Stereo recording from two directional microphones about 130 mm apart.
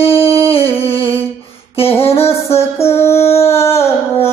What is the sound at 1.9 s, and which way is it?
Music, 20° left (ahead or behind).